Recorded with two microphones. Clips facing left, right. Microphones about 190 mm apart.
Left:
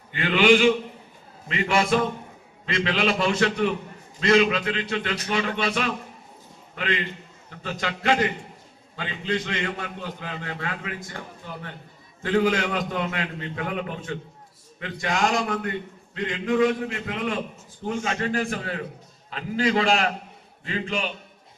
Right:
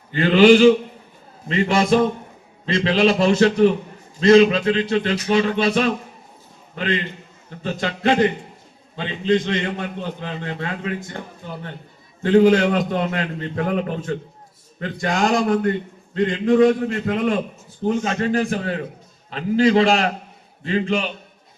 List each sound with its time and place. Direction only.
0.1 s a man's voice: 35° right (ahead or behind)
12.2 s a man's voice: 35° right (ahead or behind)